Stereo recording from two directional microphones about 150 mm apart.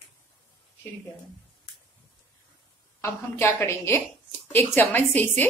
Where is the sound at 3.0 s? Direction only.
15° left (ahead or behind).